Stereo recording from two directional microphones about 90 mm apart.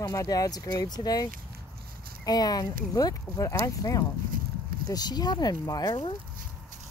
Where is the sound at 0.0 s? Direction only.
40° left (ahead or behind).